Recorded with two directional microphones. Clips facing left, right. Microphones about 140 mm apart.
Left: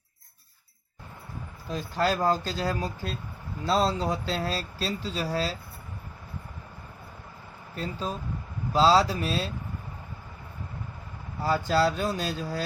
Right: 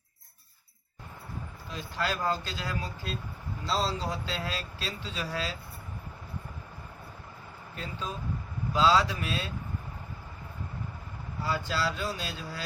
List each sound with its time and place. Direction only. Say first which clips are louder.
1.7 s speech: left 6 dB; 40° left (ahead or behind)
3.7 s speech: left 6 dB; 55° left (ahead or behind); by 5.5 s 35° left (ahead or behind)
7.8 s speech: left 5 dB; 35° left (ahead or behind)
11.4 s speech: left 7 dB; 45° left (ahead or behind)